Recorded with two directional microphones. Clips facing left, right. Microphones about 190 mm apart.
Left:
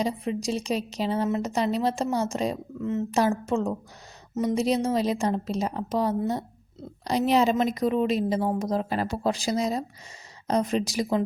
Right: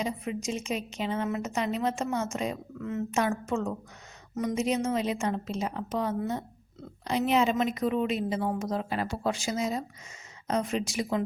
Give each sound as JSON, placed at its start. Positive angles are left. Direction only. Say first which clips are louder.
{"t": 0.0, "sound": "a woman's voice", "louder": "left 4 dB", "side_deg": 35}